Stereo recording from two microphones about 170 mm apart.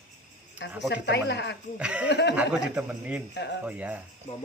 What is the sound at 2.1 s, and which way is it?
Speech, 85° left.